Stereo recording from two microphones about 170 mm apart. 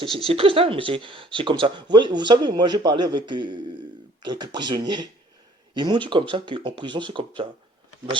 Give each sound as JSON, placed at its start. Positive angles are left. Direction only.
{"t": 0.3, "sound": "speech", "side_deg": -35}